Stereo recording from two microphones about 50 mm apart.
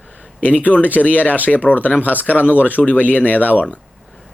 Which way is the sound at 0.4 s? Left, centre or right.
Left.